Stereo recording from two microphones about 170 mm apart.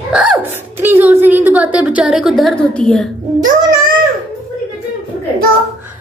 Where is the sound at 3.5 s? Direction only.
55° right (ahead or behind).